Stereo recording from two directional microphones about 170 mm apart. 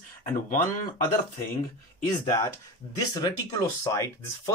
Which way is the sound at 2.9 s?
25° left (ahead or behind).